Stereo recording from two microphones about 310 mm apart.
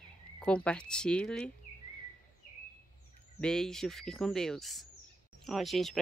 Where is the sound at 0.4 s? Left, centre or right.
Centre.